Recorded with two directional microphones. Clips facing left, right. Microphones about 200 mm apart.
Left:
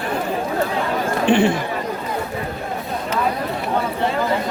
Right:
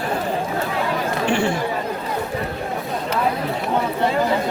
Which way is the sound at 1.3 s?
20° left (ahead or behind).